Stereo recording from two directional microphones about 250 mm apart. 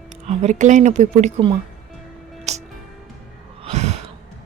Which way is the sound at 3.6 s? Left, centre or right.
Right.